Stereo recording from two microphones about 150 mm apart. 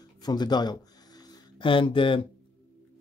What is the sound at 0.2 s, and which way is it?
Speech, 25° left (ahead or behind).